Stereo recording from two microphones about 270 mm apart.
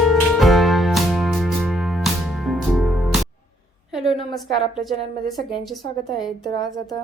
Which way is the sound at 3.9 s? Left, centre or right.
Centre.